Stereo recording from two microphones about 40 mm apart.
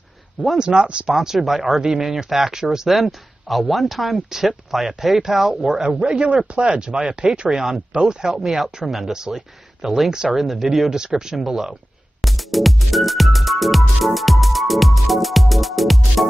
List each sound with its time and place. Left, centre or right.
0.6 s speech: right
1.4 s speech: centre
2.9 s speech: centre
5.8 s speech: centre
7.2 s speech: centre
12.2 s music: centre